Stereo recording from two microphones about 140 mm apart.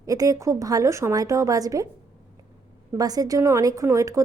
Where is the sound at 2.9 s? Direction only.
25° right (ahead or behind).